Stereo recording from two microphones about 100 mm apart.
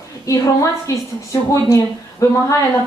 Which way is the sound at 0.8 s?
30° left (ahead or behind).